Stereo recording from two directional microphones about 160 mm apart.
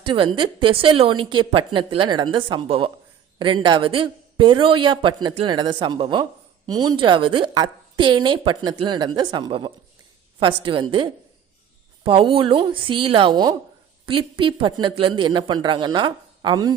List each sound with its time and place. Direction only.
0.0 s a woman's voice: 30° right (ahead or behind)